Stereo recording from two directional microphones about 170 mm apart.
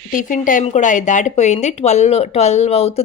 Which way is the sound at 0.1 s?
50° left (ahead or behind).